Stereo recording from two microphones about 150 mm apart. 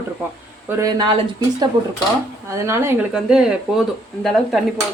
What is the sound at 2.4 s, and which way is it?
Speech, 20° right (ahead or behind).